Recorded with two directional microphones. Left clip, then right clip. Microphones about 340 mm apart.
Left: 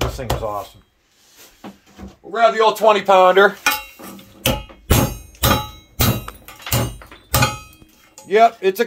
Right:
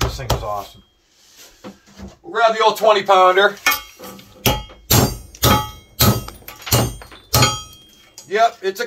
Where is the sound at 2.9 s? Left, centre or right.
Left.